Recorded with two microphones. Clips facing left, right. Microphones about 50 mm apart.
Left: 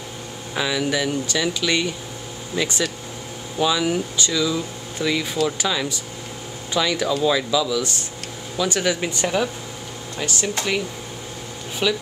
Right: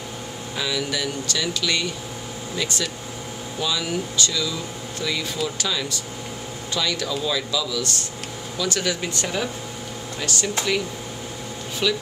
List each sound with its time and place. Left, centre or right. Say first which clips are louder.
0.6 s speech: left 4 dB; left
11.8 s speech: left 1 dB; centre